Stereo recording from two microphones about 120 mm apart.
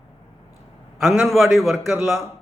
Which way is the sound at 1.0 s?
Centre (ahead or behind).